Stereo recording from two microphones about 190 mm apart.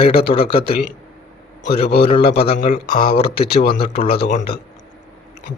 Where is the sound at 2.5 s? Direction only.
45° left (ahead or behind).